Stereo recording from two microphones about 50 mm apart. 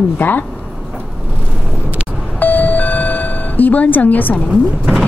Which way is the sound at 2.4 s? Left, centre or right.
Left.